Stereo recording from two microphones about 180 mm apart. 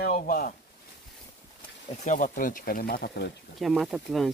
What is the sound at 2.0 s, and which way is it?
Speech, 45° left (ahead or behind).